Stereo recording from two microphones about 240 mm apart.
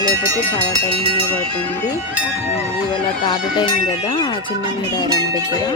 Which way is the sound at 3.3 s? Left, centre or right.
Centre.